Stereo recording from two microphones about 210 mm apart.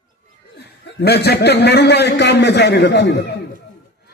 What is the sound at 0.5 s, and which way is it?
A man's voice, 50° left (ahead or behind).